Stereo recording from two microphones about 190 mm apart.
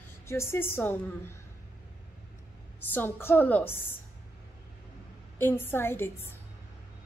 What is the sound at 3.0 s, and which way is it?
Speech, 10° left (ahead or behind).